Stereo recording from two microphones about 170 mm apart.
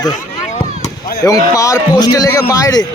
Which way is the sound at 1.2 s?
20° left (ahead or behind).